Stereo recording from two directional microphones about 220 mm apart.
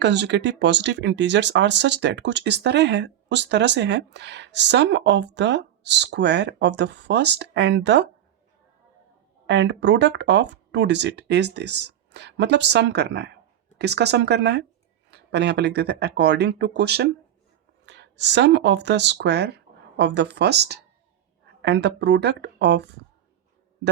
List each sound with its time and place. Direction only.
0.0 s speech: 50° right (ahead or behind)
9.5 s speech: 55° right (ahead or behind)